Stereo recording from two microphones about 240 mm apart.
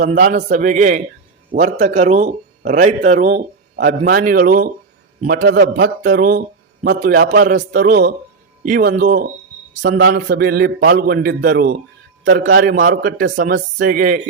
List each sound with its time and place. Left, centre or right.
0.0 s speech: right